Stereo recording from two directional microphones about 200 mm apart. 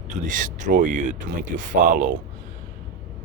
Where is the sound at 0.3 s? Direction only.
40° right (ahead or behind).